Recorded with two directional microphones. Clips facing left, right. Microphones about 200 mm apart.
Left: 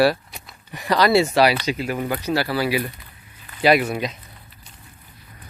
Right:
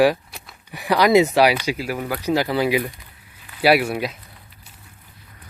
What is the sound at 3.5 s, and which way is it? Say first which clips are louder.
Speech: even; 5° right (ahead or behind).